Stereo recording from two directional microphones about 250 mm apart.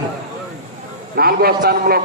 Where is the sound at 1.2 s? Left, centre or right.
Right.